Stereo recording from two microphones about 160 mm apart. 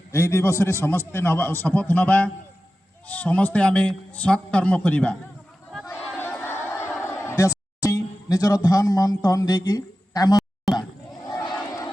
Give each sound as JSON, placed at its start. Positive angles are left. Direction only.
{"t": 0.1, "sound": "a man's voice", "side_deg": 15}
{"t": 6.1, "sound": "a sound", "side_deg": 10}
{"t": 10.8, "sound": "battle cry", "side_deg": 25}